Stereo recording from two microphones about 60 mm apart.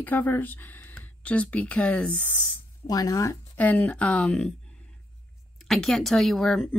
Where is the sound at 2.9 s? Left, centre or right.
Left.